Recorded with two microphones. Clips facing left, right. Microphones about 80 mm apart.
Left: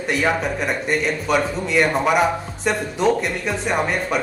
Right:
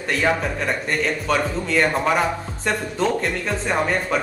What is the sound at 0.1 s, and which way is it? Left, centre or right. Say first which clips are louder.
Speech: even; centre.